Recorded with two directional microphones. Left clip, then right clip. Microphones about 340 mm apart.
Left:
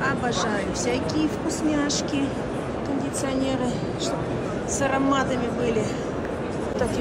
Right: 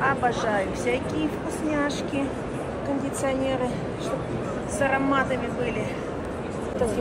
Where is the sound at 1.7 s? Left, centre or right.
Centre.